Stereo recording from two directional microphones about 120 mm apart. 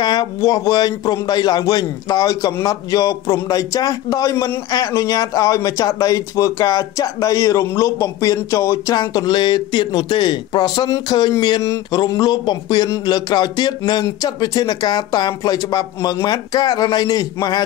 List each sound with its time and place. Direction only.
0.0 s speech: 35° left (ahead or behind)